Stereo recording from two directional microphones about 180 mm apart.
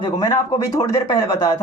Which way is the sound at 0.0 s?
20° left (ahead or behind).